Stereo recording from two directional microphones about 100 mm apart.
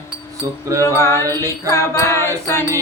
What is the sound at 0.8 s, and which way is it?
Music, 25° left (ahead or behind).